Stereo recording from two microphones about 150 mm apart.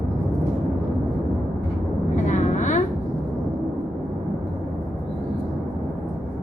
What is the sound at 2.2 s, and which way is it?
Vehicle, 55° left (ahead or behind).